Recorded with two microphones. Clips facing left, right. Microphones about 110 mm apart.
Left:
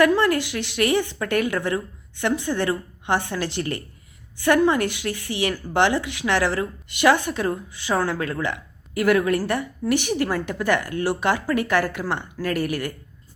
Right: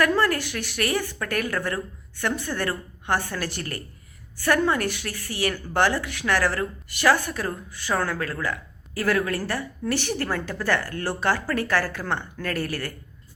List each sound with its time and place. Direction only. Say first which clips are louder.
0.0 s a woman's voice: left 4 dB; 20° left (ahead or behind)